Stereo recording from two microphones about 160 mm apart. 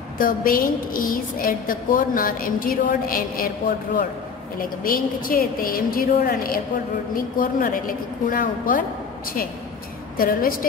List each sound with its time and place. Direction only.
0.2 s a woman's voice: 60° left (ahead or behind)
10.1 s a woman's voice: 65° left (ahead or behind)